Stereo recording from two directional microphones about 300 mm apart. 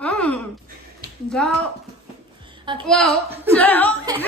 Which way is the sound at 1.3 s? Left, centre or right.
Centre.